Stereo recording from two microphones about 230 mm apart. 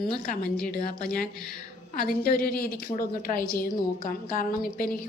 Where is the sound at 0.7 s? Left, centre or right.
Left.